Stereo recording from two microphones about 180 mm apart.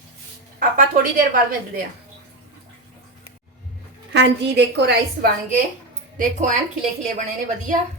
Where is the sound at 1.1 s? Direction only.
55° right (ahead or behind).